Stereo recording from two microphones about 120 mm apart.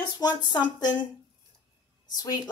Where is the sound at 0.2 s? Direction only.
35° left (ahead or behind).